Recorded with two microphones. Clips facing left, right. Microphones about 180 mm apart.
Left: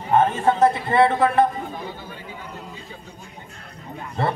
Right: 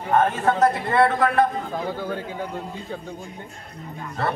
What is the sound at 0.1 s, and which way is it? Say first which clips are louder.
A man's voice: left 1 dB; 25° left (ahead or behind).